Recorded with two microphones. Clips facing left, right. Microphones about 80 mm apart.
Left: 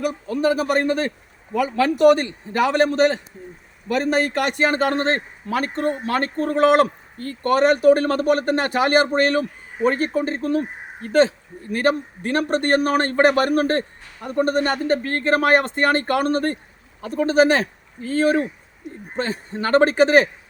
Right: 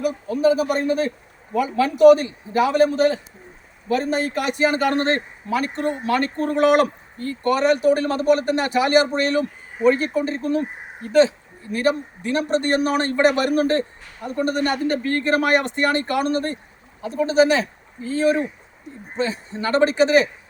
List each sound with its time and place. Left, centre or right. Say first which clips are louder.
0.0 s a man's voice: right 2 dB; left
4.9 s a man's voice: right 1 dB; left
5.5 s a man's voice: left 1 dB; left